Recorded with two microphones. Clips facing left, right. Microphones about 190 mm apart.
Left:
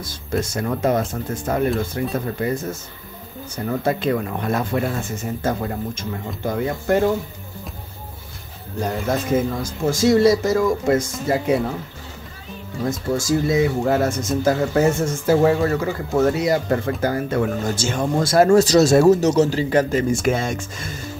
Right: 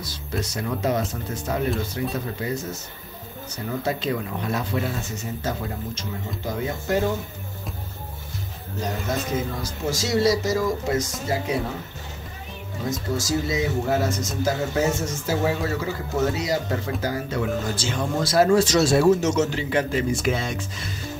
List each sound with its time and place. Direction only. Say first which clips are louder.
0.0 s speech: left 5 dB; 50° left (ahead or behind)
8.8 s speech: left 5 dB; 55° left (ahead or behind)
13.1 s speech: left 7 dB; 55° left (ahead or behind)